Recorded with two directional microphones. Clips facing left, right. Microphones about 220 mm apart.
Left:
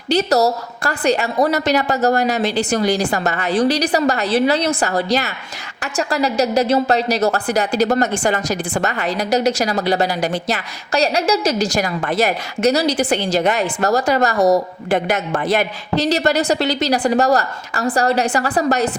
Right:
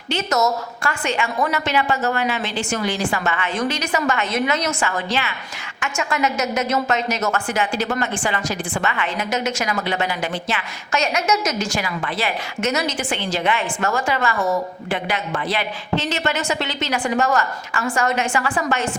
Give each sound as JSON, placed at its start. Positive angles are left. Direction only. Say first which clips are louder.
{"t": 0.1, "sound": "a woman's voice", "louder": "left 5 dB", "side_deg": 35}